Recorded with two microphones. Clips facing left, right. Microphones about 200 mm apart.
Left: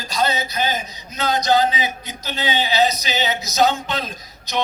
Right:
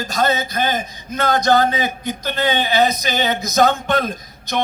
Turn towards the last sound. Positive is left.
turn(degrees=-55)  # may be behind; listen again after turning